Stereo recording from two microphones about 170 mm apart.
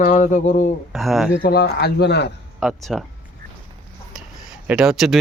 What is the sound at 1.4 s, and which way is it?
Speech, 65° left (ahead or behind).